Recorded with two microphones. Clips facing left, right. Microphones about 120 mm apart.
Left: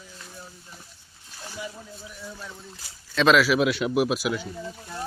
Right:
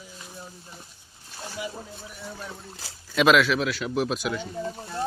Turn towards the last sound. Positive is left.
turn(degrees=-40)  # may be behind; listen again after turning